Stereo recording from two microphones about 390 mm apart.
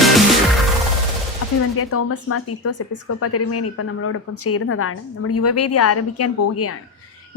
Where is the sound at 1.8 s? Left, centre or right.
Left.